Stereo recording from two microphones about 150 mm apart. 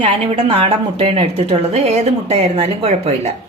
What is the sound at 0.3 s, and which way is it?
A woman's voice, 40° right (ahead or behind).